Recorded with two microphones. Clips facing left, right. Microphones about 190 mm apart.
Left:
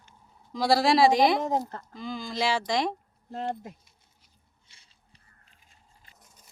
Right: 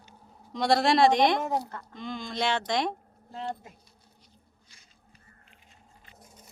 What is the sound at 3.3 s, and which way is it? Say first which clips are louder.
Speech: left 3 dB; 40° left (ahead or behind).